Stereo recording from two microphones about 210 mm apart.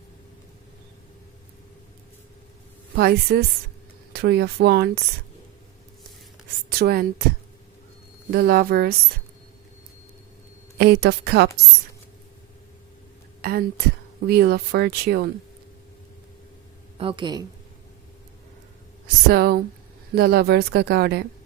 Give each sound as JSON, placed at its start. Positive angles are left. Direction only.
{"t": 2.9, "sound": "speech", "side_deg": -50}
{"t": 6.7, "sound": "speech", "side_deg": -45}
{"t": 8.3, "sound": "speech", "side_deg": -50}
{"t": 10.8, "sound": "speech", "side_deg": -50}
{"t": 13.4, "sound": "speech", "side_deg": -45}
{"t": 17.0, "sound": "speech", "side_deg": -25}
{"t": 19.0, "sound": "speech", "side_deg": -45}